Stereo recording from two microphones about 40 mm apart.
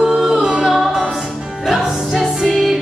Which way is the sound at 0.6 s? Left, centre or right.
Centre.